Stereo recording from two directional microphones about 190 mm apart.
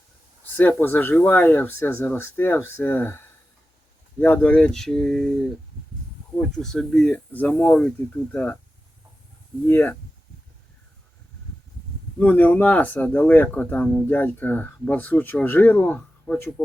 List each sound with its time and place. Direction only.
0.5 s speech: 10° left (ahead or behind)
6.4 s speech: centre (ahead or behind)
9.6 s speech: 10° left (ahead or behind)
12.2 s speech: 10° left (ahead or behind)